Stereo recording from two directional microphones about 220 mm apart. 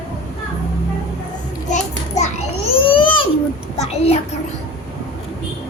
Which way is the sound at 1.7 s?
30° left (ahead or behind).